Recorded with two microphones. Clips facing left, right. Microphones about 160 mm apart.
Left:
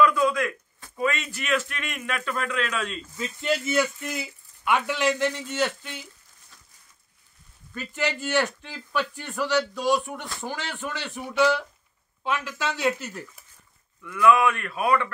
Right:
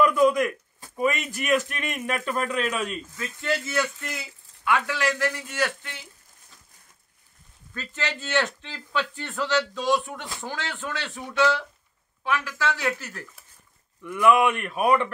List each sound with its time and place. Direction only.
0.0 s a sound: 15° right (ahead or behind)
0.8 s speech: 15° right (ahead or behind)
1.8 s speech: 45° right (ahead or behind)
2.6 s speech: 10° right (ahead or behind)
3.2 s speech: 20° left (ahead or behind)
7.7 s speech: 15° left (ahead or behind)
14.0 s speech: 15° right (ahead or behind)